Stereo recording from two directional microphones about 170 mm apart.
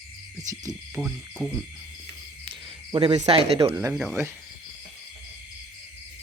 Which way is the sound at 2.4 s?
25° right (ahead or behind).